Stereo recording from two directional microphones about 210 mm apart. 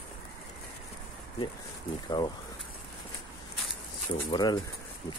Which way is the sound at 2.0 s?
20° left (ahead or behind).